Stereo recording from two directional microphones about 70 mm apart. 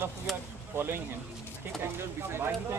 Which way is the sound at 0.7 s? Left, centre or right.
Right.